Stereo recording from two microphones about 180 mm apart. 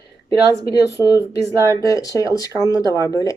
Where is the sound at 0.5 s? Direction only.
20° left (ahead or behind).